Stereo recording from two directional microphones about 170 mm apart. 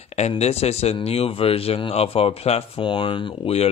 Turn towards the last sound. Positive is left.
turn(degrees=35)  # may be behind; listen again after turning